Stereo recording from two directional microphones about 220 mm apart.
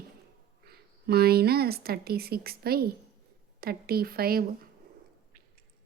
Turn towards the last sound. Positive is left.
turn(degrees=-45)  # may be behind; listen again after turning